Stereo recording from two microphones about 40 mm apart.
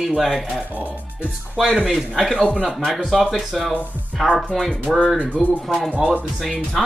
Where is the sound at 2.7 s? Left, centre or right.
Centre.